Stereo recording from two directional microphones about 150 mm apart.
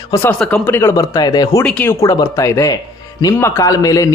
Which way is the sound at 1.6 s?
15° left (ahead or behind).